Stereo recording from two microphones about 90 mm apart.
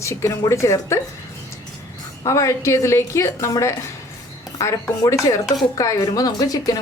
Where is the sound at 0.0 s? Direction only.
30° left (ahead or behind).